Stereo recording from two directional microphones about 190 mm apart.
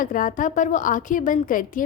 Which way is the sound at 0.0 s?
45° left (ahead or behind).